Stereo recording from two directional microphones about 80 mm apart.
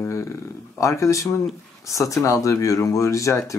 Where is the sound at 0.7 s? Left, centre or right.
Left.